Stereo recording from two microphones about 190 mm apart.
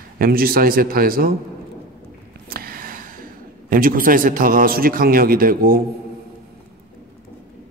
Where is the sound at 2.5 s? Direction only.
50° right (ahead or behind).